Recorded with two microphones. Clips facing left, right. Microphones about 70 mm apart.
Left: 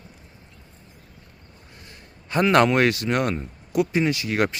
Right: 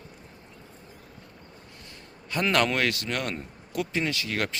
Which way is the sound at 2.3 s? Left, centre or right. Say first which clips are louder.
Left 7 dB; left.